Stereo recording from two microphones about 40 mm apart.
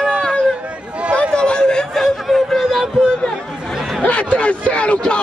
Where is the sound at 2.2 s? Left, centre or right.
Centre.